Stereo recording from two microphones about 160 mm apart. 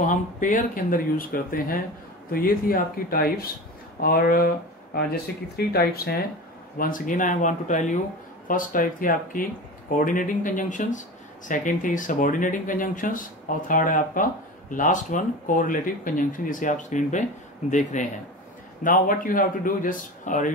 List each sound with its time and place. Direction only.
0.0 s speech: 55° left (ahead or behind); by 6.1 s 75° left (ahead or behind)
6.8 s speech: 55° left (ahead or behind)